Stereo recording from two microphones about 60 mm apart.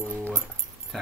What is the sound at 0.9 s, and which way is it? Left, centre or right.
Speech, centre.